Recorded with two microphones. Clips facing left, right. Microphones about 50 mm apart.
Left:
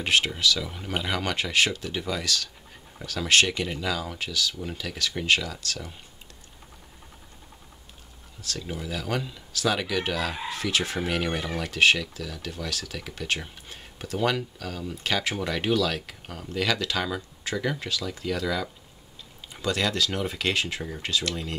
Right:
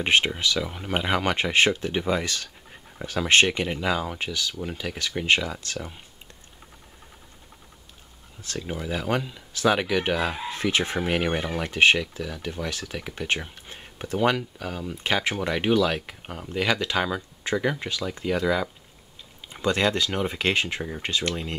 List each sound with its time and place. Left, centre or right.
0.0 s speech: right
8.4 s speech: right